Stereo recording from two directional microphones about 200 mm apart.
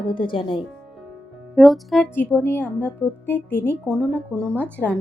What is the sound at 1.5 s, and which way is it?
Speech, centre (ahead or behind).